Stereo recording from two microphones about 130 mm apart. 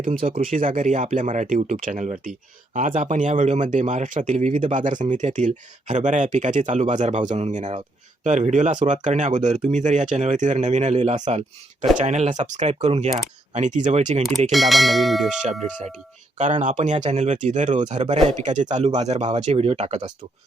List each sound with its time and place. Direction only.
0.3 s speech: 85° right; by 2.3 s 70° right (ahead or behind)
2.7 s speech: 80° right; by 13.1 s 55° right (ahead or behind)
13.5 s speech: 65° right (ahead or behind)
14.5 s speech: centre (ahead or behind)
16.4 s speech: 65° right (ahead or behind)
17.9 s speech: 55° right (ahead or behind)